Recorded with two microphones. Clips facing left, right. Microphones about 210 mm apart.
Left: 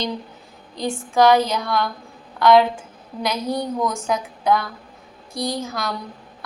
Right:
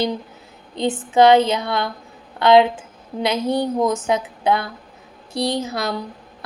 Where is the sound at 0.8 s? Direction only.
25° right (ahead or behind).